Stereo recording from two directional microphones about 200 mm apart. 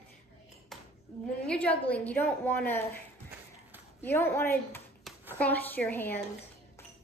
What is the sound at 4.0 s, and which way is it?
A woman's voice, 10° left (ahead or behind).